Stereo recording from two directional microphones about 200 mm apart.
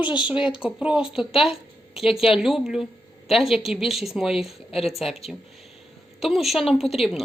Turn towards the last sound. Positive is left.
turn(degrees=0)  # may be behind; listen again after turning